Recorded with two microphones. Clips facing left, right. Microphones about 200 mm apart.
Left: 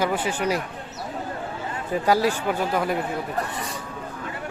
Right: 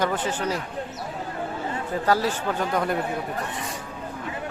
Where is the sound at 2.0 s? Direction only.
10° left (ahead or behind).